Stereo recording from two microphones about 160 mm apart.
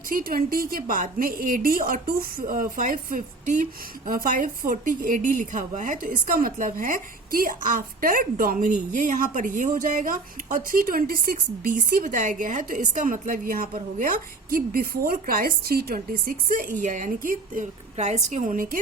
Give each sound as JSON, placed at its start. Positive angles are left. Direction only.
{"t": 0.1, "sound": "a woman's voice", "side_deg": -65}